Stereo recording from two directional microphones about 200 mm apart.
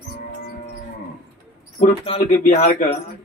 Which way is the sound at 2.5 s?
40° left (ahead or behind).